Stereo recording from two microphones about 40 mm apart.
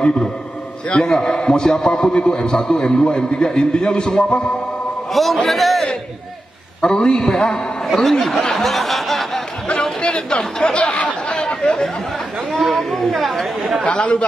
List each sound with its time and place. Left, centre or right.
0.8 s a man's voice: left
1.1 s a man's voice: centre
5.1 s speech: centre
6.8 s a man's voice: centre
8.5 s snicker: centre
9.8 s speech: centre
10.9 s a sound: left
11.3 s chatter: centre
12.5 s speech: centre
13.8 s a man's voice: left